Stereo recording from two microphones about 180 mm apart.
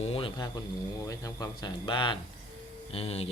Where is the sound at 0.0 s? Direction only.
30° left (ahead or behind).